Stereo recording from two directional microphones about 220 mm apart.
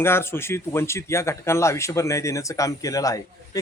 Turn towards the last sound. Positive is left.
turn(degrees=15)  # may be behind; listen again after turning